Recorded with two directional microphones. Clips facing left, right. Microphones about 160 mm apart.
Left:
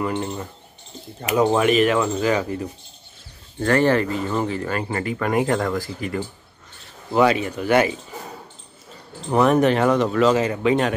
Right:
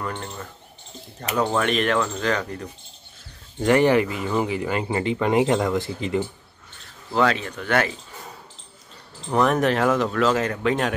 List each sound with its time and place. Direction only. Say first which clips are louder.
0.0 s speech: left 6 dB; 10° left (ahead or behind)
3.5 s speech: right 1 dB; 15° right (ahead or behind)
7.1 s speech: left 4 dB; 10° left (ahead or behind)
9.3 s speech: left 3 dB; centre (ahead or behind)